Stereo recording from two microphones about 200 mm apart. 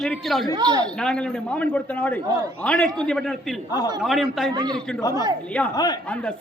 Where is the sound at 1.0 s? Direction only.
5° left (ahead or behind).